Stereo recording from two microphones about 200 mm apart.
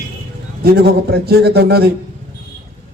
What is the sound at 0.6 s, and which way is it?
A man's voice, 50° right (ahead or behind).